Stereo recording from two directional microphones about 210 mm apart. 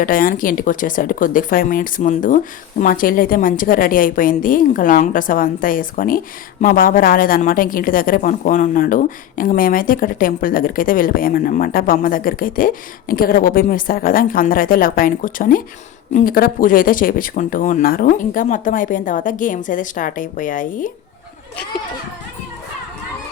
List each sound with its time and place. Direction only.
0.0 s speech: 40° left (ahead or behind)